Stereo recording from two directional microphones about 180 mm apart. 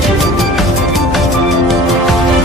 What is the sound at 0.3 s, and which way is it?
Music, centre (ahead or behind).